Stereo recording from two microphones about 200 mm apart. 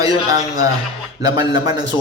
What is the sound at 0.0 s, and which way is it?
A man's voice, 20° right (ahead or behind).